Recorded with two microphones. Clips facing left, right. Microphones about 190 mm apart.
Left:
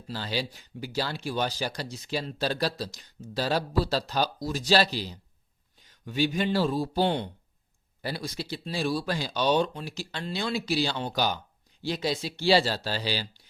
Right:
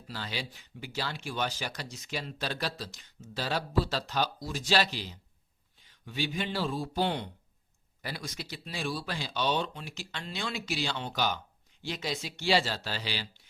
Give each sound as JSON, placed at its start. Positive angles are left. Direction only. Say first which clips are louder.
{"t": 0.1, "sound": "speech", "louder": "left 6 dB", "side_deg": 35}